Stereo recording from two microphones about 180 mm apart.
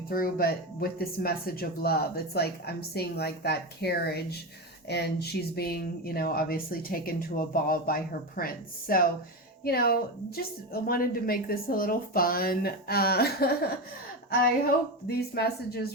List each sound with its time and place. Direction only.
0.1 s speech: 55° left (ahead or behind)
15.0 s speech: 60° left (ahead or behind)